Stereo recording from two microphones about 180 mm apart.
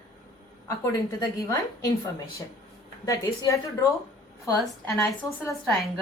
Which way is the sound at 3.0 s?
15° left (ahead or behind).